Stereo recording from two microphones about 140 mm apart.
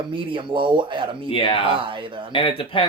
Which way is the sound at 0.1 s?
35° right (ahead or behind).